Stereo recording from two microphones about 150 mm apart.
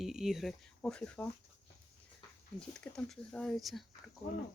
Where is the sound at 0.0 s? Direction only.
5° right (ahead or behind).